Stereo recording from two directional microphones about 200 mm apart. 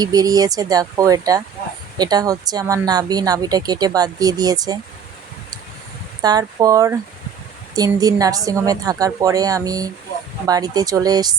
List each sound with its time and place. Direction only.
0.0 s a woman's voice: 20° right (ahead or behind)
6.2 s a woman's voice: 20° right (ahead or behind)